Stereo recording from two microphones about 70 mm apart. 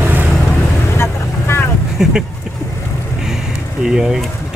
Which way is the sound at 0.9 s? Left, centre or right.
Left.